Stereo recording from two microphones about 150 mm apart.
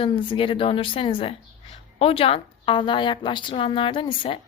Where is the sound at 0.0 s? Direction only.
35° left (ahead or behind).